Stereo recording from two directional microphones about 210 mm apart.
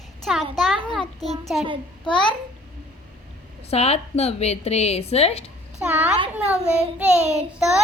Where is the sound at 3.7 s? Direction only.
30° left (ahead or behind).